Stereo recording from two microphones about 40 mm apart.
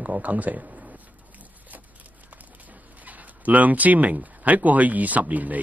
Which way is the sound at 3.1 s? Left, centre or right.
Right.